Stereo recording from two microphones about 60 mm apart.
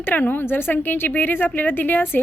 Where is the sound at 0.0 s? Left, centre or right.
Left.